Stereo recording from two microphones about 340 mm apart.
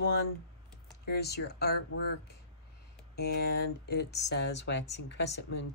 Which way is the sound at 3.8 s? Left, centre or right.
Left.